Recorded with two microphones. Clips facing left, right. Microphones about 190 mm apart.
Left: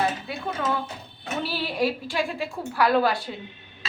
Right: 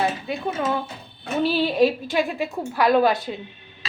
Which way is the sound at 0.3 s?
20° right (ahead or behind).